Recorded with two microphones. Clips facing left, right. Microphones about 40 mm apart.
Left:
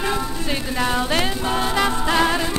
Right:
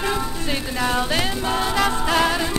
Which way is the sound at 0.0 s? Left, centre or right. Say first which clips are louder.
Even; centre.